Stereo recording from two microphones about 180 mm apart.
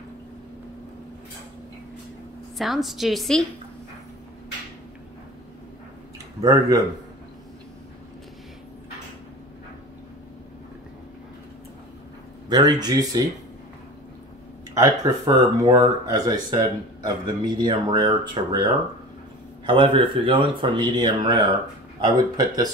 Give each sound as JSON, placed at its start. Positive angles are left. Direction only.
{"t": 2.5, "sound": "a woman's voice", "side_deg": 0}
{"t": 6.4, "sound": "speech", "side_deg": -20}
{"t": 12.4, "sound": "speech", "side_deg": -20}
{"t": 14.7, "sound": "speech", "side_deg": -20}